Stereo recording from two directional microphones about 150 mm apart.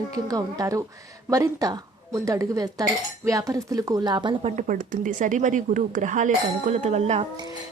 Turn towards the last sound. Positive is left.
turn(degrees=-45)  # may be behind; listen again after turning